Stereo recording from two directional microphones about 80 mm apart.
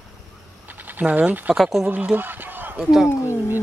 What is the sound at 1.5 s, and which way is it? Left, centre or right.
Speech, centre.